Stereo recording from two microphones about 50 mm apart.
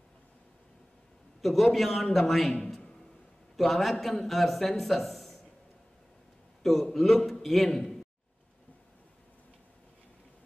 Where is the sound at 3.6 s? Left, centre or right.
Centre.